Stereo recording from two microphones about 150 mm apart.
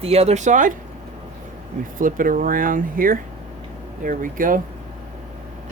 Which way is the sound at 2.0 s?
65° right (ahead or behind).